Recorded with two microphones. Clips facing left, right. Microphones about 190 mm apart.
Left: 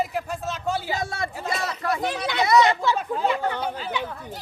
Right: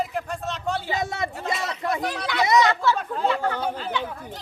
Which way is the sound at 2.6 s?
15° left (ahead or behind).